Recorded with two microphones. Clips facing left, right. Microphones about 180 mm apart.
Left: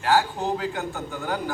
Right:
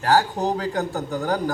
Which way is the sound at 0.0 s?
40° right (ahead or behind).